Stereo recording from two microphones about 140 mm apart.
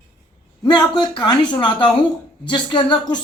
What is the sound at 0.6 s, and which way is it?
Speech, 30° left (ahead or behind).